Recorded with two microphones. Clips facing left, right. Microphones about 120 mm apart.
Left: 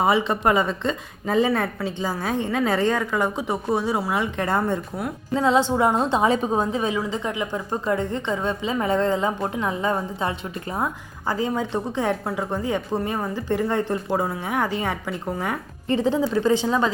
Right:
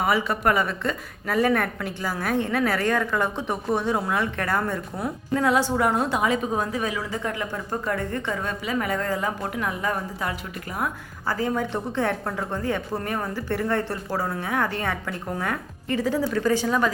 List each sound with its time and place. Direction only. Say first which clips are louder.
0.0 s a woman's voice: left 3 dB; 25° left (ahead or behind)
3.0 s speech: left 1 dB; 10° left (ahead or behind)
4.1 s a woman's voice: left 2 dB; 20° left (ahead or behind)
15.9 s a woman's voice: left 3 dB; 25° left (ahead or behind)